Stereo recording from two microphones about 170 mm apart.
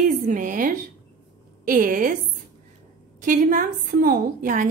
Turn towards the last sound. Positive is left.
turn(degrees=-50)  # may be behind; listen again after turning